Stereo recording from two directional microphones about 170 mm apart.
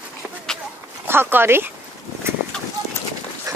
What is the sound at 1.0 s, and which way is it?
Speech, 15° right (ahead or behind).